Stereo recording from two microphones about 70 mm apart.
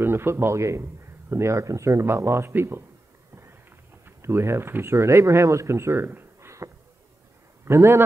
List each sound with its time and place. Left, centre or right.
0.0 s speech: right
4.0 s speech: right